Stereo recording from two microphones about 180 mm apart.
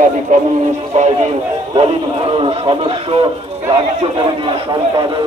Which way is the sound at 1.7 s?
30° right (ahead or behind).